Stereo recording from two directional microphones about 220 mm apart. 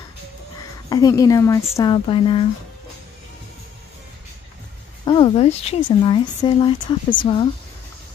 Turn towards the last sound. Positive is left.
turn(degrees=20)  # may be behind; listen again after turning